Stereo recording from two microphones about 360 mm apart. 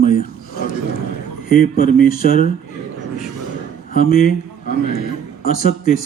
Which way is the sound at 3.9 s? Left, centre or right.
Left.